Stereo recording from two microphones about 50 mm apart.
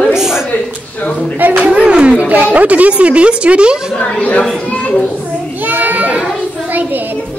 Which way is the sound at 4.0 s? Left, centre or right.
Left.